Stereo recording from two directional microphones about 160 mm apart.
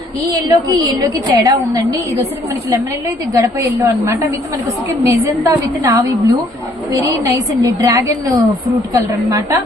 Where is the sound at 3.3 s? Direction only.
20° right (ahead or behind).